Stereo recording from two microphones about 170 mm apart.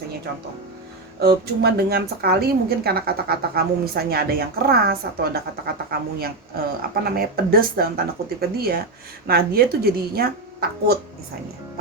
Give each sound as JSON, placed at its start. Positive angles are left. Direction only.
{"t": 1.2, "sound": "speech", "side_deg": -65}